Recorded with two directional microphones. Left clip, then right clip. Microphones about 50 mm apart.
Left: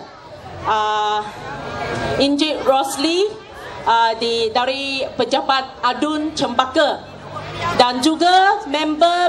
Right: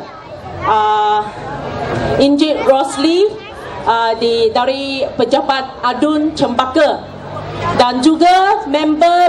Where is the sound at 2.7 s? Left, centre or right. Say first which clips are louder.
Right 4 dB; centre.